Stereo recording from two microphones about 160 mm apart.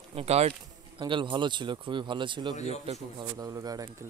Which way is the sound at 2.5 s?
45° left (ahead or behind).